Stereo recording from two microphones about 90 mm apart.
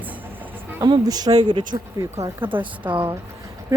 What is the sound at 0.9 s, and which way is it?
Speech, 50° right (ahead or behind).